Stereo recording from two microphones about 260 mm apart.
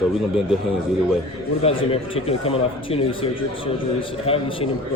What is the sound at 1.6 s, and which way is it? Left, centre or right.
Speech, left.